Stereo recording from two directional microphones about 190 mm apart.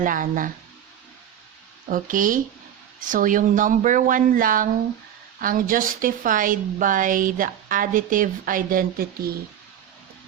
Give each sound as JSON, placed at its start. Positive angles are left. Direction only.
{"t": 0.0, "sound": "a woman's voice", "side_deg": -45}
{"t": 1.9, "sound": "a woman's voice", "side_deg": -45}